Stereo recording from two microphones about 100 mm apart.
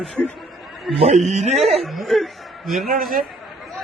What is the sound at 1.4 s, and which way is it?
Speech, 90° right.